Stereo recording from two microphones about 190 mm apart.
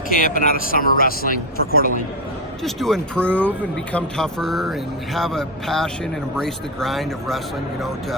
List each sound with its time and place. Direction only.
0.1 s speech: 45° left (ahead or behind)
2.6 s speech: centre (ahead or behind)